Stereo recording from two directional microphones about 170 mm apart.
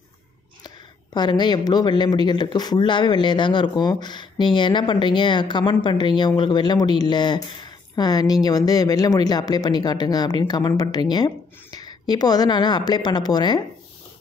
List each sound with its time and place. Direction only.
0.7 s speech: 25° left (ahead or behind)